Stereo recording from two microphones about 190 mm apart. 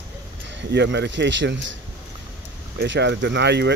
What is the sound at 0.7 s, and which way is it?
Speech, 65° right (ahead or behind).